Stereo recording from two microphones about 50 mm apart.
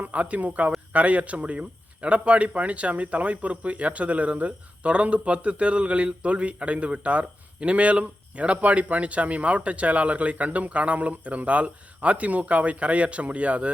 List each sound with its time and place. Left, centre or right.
0.0 s speech: right